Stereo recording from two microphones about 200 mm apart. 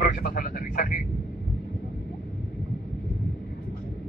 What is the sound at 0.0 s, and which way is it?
Speech, 50° left (ahead or behind).